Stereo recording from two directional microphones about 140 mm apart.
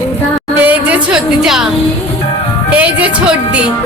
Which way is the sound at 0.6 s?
10° right (ahead or behind).